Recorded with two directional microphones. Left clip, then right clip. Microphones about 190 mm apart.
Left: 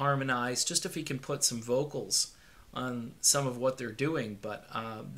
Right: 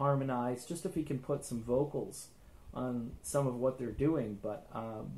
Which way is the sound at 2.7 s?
20° left (ahead or behind).